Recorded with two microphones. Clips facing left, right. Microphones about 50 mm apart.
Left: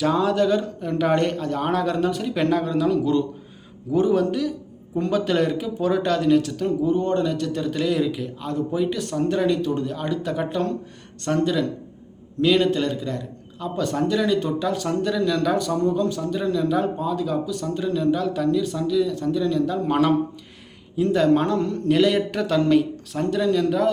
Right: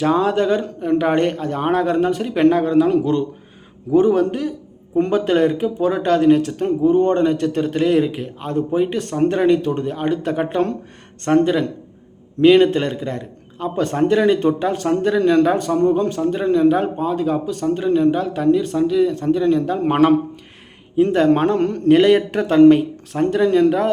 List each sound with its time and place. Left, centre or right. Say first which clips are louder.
0.0 s a man's voice: right 3 dB; right